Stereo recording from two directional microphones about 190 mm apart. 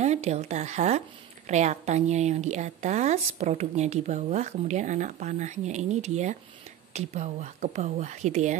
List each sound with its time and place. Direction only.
0.0 s a woman's voice: 35° right (ahead or behind)